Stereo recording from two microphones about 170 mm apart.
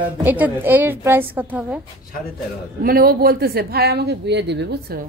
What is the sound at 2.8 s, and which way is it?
Speech, 65° right (ahead or behind).